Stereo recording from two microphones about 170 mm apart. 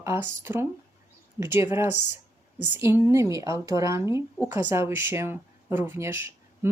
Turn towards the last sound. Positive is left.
turn(degrees=-15)  # may be behind; listen again after turning